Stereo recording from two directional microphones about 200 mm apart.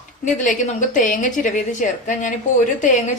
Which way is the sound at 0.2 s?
40° left (ahead or behind).